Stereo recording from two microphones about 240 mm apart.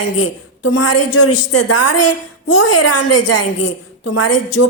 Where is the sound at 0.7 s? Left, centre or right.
Left.